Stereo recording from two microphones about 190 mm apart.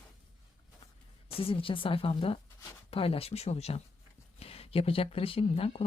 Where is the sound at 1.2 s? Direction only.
30° left (ahead or behind).